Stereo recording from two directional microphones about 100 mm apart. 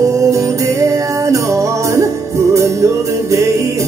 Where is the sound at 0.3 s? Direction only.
30° right (ahead or behind).